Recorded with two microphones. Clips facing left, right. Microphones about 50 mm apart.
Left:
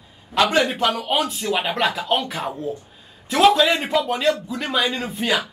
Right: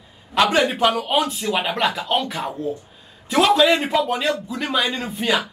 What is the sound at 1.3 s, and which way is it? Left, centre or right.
Speech, centre.